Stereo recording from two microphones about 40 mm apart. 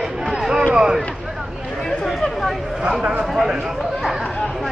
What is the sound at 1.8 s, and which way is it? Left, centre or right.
Chatter, centre.